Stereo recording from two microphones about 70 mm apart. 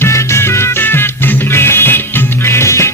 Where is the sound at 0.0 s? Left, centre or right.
Left.